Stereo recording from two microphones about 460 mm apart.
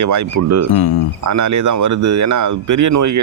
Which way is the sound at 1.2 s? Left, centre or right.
Right.